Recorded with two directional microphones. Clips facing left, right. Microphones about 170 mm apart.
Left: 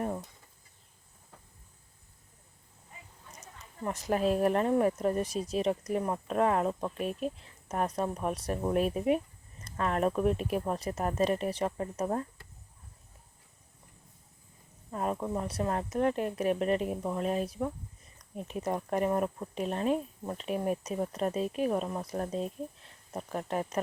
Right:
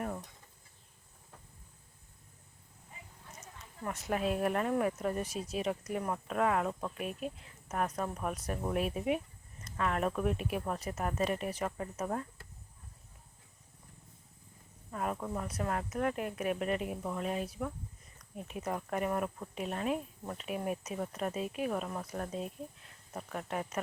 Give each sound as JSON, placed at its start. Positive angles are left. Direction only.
{"t": 4.1, "sound": "speech", "side_deg": 35}
{"t": 14.8, "sound": "speech", "side_deg": 30}